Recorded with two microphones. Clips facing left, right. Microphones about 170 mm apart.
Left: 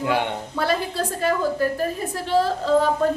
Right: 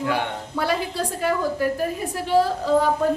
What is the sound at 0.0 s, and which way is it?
Speech, 20° left (ahead or behind).